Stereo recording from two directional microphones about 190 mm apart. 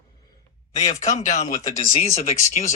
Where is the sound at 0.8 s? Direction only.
40° left (ahead or behind).